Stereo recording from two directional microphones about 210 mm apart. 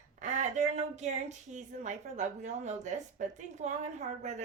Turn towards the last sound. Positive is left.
turn(degrees=-35)  # may be behind; listen again after turning